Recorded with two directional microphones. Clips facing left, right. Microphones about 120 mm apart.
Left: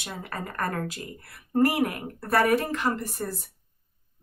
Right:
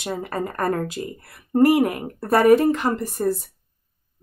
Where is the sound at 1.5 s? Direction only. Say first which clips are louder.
Right 7 dB; 25° right (ahead or behind).